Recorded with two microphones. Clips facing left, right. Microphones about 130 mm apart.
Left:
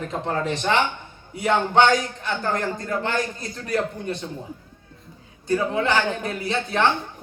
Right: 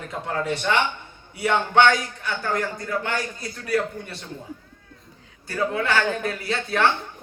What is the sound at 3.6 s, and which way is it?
Speech, 20° left (ahead or behind).